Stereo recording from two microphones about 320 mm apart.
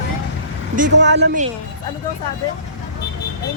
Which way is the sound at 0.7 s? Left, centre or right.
Right.